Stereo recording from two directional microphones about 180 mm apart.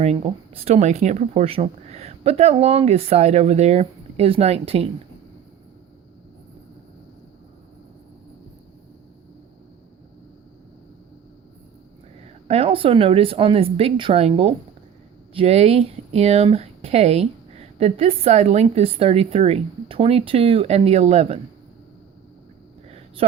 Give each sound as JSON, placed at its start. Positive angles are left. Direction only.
{"t": 0.0, "sound": "speech", "side_deg": -35}
{"t": 12.5, "sound": "speech", "side_deg": -30}